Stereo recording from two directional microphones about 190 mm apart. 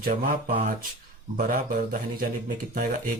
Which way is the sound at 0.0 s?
50° right (ahead or behind).